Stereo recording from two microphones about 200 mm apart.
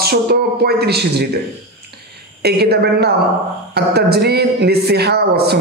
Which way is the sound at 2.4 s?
55° right (ahead or behind).